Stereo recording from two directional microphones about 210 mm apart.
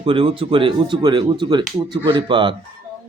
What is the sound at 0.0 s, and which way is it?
Speech, 25° right (ahead or behind).